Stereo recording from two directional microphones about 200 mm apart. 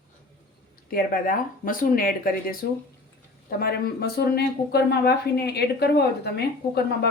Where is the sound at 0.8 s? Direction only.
45° left (ahead or behind).